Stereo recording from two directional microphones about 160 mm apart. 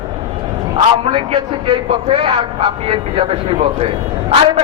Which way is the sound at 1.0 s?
35° right (ahead or behind).